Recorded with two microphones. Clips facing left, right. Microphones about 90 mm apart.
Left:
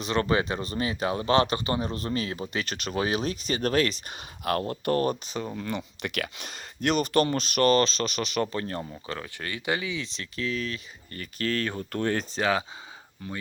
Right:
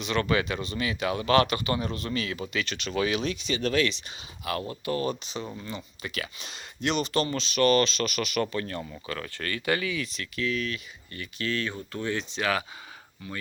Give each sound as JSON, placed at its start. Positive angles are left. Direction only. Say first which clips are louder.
{"t": 0.0, "sound": "speech", "louder": "left 1 dB", "side_deg": 35}
{"t": 5.5, "sound": "speech", "louder": "left 5 dB", "side_deg": 65}
{"t": 8.8, "sound": "speech", "louder": "even", "side_deg": 20}
{"t": 12.4, "sound": "speech", "louder": "left 2 dB", "side_deg": 25}